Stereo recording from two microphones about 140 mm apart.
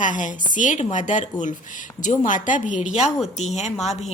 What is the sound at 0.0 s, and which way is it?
A woman's voice, 65° left (ahead or behind).